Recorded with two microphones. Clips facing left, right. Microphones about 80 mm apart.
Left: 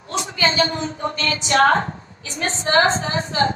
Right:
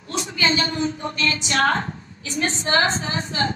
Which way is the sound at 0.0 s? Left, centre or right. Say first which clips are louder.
Left 2 dB; left.